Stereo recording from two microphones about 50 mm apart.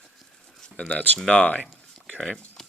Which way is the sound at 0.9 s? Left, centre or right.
Left.